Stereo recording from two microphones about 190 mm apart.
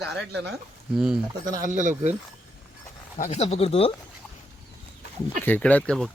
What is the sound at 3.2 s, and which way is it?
Speech, 35° left (ahead or behind).